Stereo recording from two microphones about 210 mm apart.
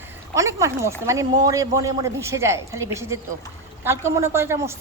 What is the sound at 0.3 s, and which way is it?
A woman's voice, 15° right (ahead or behind).